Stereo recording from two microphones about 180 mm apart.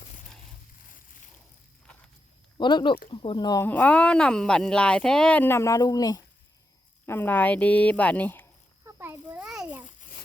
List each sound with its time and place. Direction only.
2.6 s speech: 25° left (ahead or behind)
3.7 s speech: 10° left (ahead or behind)
9.0 s a sound: 10° right (ahead or behind)